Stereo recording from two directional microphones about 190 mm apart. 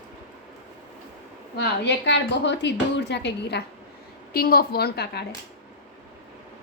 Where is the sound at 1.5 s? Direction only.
65° left (ahead or behind).